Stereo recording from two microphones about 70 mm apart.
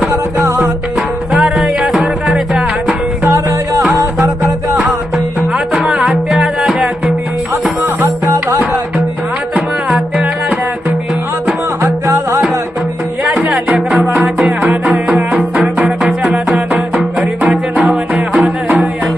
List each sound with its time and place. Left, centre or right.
0.1 s music: right
0.9 s music: centre
1.6 s music: centre
2.2 s music: centre
3.2 s music: right
5.5 s music: centre
6.1 s music: centre
8.0 s music: right
11.8 s music: right
13.2 s music: right
13.7 s music: centre
14.6 s music: centre
17.7 s music: centre